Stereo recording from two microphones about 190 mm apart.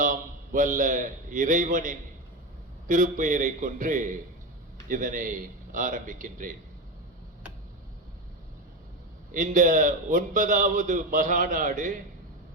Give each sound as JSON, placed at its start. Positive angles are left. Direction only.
{"t": 0.0, "sound": "a man's voice", "side_deg": -45}
{"t": 9.3, "sound": "a man's voice", "side_deg": -45}